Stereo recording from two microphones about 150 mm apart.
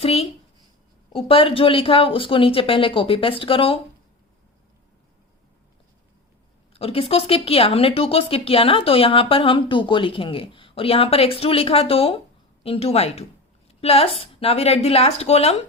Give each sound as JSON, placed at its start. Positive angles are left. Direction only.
{"t": 0.0, "sound": "a woman's voice", "side_deg": 40}
{"t": 6.7, "sound": "a woman's voice", "side_deg": 40}